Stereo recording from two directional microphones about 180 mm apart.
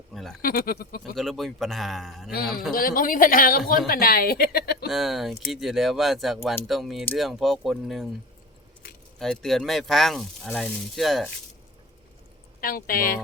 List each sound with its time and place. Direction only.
0.1 s a sound: centre (ahead or behind)
0.4 s speech: 55° left (ahead or behind)
1.1 s speech: centre (ahead or behind)
2.3 s speech: 55° left (ahead or behind)
4.9 s speech: centre (ahead or behind)
9.1 s speech: centre (ahead or behind)
12.5 s a woman's voice: 55° left (ahead or behind)